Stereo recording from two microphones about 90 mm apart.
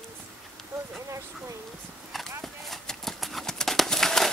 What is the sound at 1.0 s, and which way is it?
Speech, 35° right (ahead or behind).